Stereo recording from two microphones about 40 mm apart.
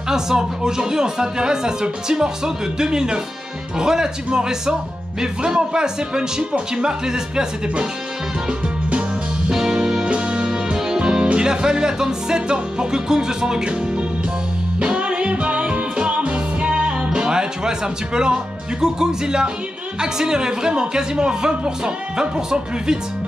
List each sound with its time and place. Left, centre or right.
0.1 s speech: centre
9.5 s music: centre
10.0 s music: right
11.3 s speech: right
14.9 s music: right
20.0 s speech: centre